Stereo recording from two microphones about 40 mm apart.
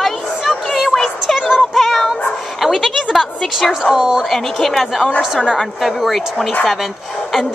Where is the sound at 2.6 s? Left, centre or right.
Centre.